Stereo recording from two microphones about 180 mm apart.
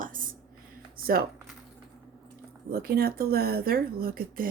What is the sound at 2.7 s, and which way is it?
Speech, 60° right (ahead or behind).